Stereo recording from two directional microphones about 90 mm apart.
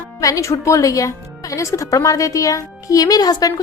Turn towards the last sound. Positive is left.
turn(degrees=45)  # may be behind; listen again after turning